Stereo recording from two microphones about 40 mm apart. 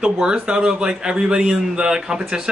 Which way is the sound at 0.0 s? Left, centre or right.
Centre.